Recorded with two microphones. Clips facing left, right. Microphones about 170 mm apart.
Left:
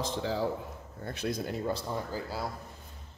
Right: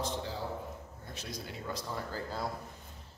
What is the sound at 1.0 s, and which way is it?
Speech, 60° left (ahead or behind).